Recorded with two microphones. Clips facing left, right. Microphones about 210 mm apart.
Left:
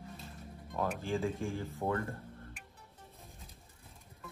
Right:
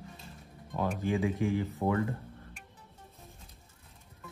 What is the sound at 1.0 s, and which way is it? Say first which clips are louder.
Speech: right 5 dB; 15° right (ahead or behind).